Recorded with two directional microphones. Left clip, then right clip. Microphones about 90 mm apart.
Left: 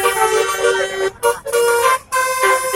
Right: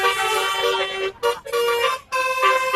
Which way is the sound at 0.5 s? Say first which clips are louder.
Left 5 dB; 25° left (ahead or behind).